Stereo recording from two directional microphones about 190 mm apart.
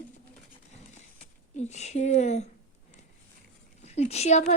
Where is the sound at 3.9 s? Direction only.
35° left (ahead or behind).